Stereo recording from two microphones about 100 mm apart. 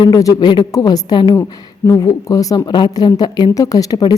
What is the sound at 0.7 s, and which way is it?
Speech, 40° left (ahead or behind).